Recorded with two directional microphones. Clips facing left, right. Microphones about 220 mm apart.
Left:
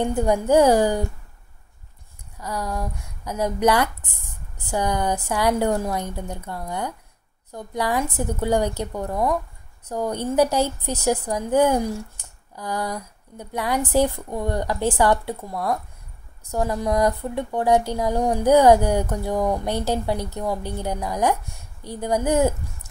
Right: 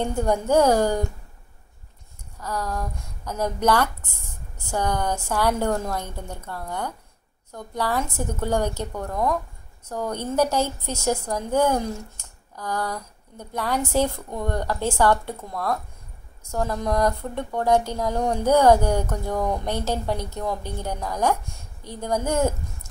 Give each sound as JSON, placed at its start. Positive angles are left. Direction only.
{"t": 0.0, "sound": "speech", "side_deg": 10}
{"t": 2.4, "sound": "speech", "side_deg": 10}